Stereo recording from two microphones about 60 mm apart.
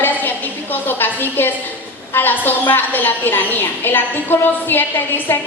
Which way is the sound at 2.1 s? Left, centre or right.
Left.